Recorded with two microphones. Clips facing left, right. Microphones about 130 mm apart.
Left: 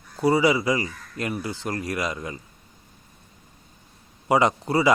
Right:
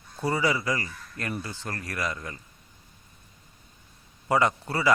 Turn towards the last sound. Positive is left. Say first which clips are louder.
# left 4 dB
turn(degrees=15)  # may be behind; listen again after turning